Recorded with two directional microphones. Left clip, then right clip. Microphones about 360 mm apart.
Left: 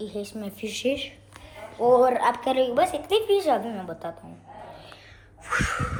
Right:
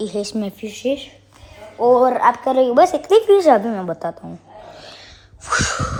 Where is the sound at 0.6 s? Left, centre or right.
Centre.